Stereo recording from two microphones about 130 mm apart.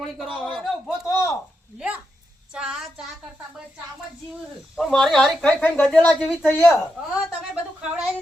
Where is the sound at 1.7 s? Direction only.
10° right (ahead or behind).